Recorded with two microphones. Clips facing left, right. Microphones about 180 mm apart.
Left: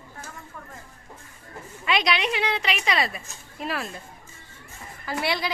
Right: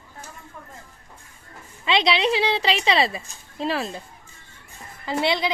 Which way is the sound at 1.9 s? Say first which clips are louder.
Right 4 dB; 25° right (ahead or behind).